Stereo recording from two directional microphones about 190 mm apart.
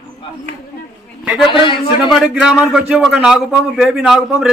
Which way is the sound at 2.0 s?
Centre (ahead or behind).